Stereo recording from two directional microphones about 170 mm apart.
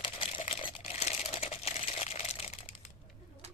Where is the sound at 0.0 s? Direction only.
30° left (ahead or behind).